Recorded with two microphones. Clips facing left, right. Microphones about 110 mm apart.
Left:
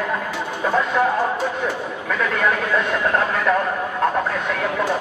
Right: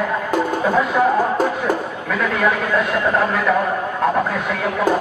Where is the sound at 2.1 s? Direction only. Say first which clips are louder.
Right 2 dB; 5° right (ahead or behind).